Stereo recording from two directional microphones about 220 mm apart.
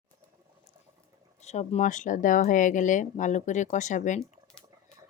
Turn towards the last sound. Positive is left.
turn(degrees=35)  # may be behind; listen again after turning